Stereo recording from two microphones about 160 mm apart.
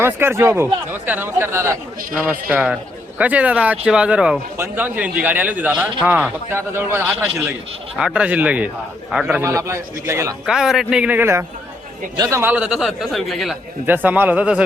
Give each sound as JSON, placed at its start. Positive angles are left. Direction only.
{"t": 0.0, "sound": "a man's voice", "side_deg": -15}
{"t": 9.4, "sound": "speech", "side_deg": -15}
{"t": 10.4, "sound": "a man's voice", "side_deg": -5}
{"t": 13.8, "sound": "speech", "side_deg": -10}